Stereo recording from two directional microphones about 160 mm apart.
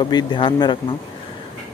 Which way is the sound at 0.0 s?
30° left (ahead or behind).